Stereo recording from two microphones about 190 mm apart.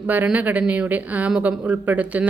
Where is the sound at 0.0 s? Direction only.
10° right (ahead or behind).